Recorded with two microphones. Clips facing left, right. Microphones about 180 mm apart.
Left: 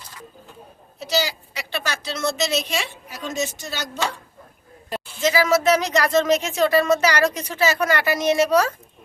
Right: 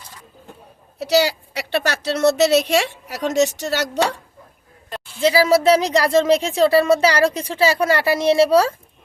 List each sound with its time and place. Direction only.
0.9 s speech: 65° right (ahead or behind)
5.2 s speech: 30° right (ahead or behind)